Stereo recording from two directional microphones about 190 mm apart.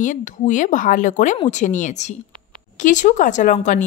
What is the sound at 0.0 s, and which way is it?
A woman's voice, 40° left (ahead or behind).